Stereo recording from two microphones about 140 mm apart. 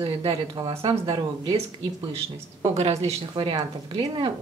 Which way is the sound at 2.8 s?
50° right (ahead or behind).